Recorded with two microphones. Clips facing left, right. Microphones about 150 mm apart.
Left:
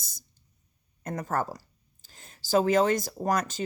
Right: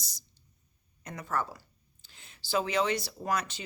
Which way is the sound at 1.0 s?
45° left (ahead or behind).